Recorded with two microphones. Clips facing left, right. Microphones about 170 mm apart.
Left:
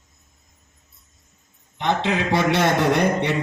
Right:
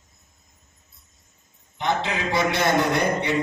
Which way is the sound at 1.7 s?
70° left (ahead or behind).